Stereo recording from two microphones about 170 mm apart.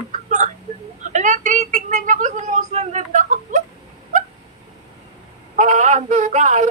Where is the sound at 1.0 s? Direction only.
45° right (ahead or behind).